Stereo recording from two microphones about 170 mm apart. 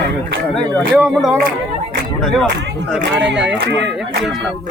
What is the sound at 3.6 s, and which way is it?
Speech, 90° right.